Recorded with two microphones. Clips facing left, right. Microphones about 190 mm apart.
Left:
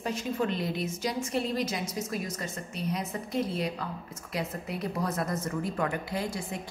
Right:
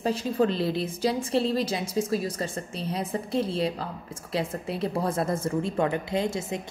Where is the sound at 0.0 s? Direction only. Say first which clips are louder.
Right 6 dB; 30° right (ahead or behind).